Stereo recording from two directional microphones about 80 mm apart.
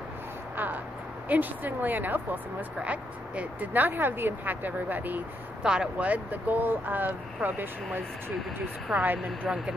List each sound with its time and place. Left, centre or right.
1.3 s speech: right
5.6 s speech: centre